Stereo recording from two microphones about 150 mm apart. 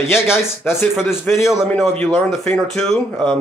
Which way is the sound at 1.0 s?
15° left (ahead or behind).